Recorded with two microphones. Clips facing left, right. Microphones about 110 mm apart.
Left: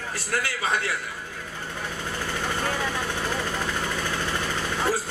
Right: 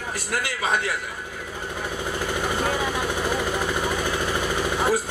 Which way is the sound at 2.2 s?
15° right (ahead or behind).